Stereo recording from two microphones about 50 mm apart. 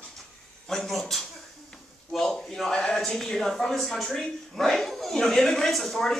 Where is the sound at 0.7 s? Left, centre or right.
Centre.